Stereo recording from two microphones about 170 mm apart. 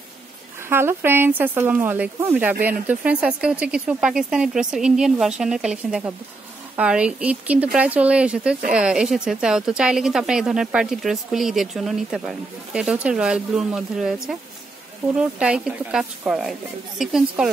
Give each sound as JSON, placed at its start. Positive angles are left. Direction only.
{"t": 0.7, "sound": "a woman's voice", "side_deg": -15}